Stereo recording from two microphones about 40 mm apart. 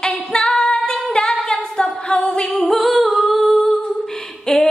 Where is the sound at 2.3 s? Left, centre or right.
Left.